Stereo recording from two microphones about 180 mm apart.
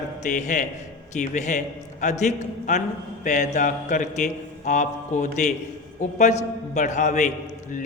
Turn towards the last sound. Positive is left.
turn(degrees=45)  # may be behind; listen again after turning